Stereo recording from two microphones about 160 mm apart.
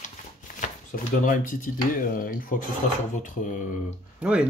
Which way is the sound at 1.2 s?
55° left (ahead or behind).